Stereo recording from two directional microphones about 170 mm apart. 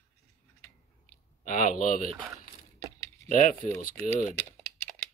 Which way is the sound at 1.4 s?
50° left (ahead or behind).